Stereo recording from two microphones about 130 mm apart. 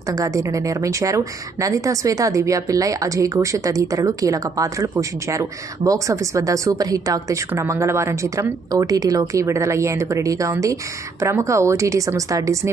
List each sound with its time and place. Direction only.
0.1 s a woman's voice: 25° right (ahead or behind)